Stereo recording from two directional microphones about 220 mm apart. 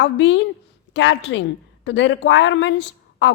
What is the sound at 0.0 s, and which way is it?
A woman's voice, 55° left (ahead or behind).